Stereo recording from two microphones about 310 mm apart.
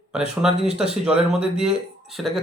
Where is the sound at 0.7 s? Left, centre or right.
Centre.